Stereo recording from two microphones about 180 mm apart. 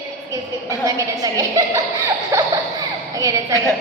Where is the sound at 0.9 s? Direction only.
15° right (ahead or behind).